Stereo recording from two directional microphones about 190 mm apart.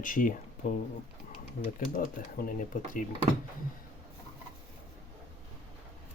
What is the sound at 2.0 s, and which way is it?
Speech, 45° left (ahead or behind).